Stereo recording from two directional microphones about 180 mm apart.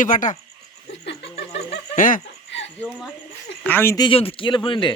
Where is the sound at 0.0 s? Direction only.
45° left (ahead or behind).